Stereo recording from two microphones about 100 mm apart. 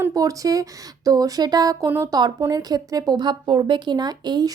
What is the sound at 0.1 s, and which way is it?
A woman's voice, 35° right (ahead or behind).